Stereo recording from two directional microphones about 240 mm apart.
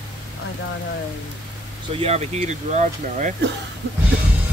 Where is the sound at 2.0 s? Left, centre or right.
Right.